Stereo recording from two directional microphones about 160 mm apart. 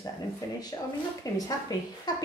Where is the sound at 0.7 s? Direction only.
25° left (ahead or behind).